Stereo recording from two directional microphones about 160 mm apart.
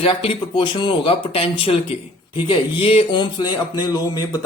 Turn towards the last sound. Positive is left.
turn(degrees=20)  # may be behind; listen again after turning